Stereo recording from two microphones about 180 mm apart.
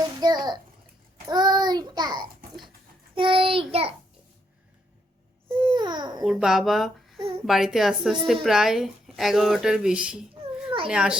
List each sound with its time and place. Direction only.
0.2 s a sound: 25° right (ahead or behind)
1.3 s child singing: 25° right (ahead or behind)
3.7 s a child's voice: 35° right (ahead or behind)
5.6 s babbling: 25° right (ahead or behind)
6.2 s speech: 5° right (ahead or behind)
7.2 s a child's voice: 30° right (ahead or behind)
7.4 s speech: centre (ahead or behind)